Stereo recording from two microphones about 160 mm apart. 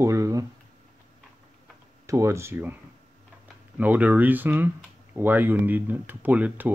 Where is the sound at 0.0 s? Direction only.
20° right (ahead or behind).